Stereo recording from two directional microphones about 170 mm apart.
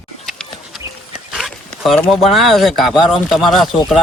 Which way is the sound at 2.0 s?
Centre (ahead or behind).